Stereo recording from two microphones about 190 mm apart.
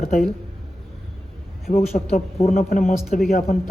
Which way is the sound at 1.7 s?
35° left (ahead or behind).